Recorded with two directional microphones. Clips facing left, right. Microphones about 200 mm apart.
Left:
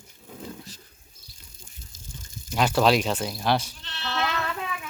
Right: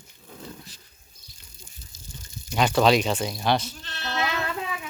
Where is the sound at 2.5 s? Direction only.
5° left (ahead or behind).